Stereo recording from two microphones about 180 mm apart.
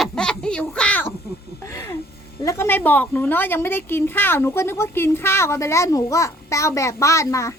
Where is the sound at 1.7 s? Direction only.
15° left (ahead or behind).